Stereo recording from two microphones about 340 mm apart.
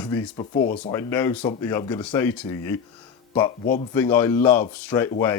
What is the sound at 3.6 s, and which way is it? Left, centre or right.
Speech, left.